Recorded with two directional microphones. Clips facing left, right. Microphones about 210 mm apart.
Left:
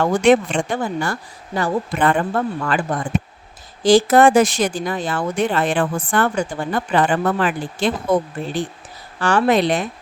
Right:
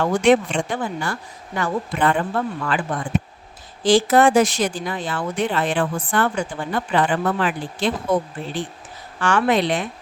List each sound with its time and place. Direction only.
0.0 s speech: 50° left (ahead or behind)
2.0 s speech: 50° left (ahead or behind)
9.1 s speech: 35° left (ahead or behind)